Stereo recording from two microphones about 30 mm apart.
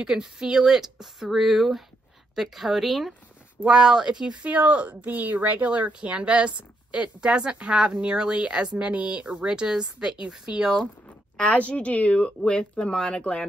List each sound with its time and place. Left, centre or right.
0.0 s speech: right; by 3.2 s centre
3.6 s speech: right
4.5 s speech: right
5.1 s speech: right
5.7 s speech: right
5.9 s a woman's voice: right
8.9 s a woman's voice: right
9.5 s a woman's voice: right
11.4 s a woman's voice: left
12.9 s speech: centre